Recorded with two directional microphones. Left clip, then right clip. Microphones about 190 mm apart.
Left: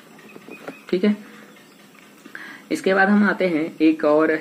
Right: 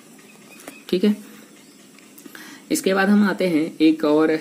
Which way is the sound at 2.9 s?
80° right.